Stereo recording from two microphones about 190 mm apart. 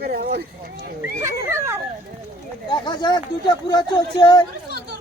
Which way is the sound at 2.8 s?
25° left (ahead or behind).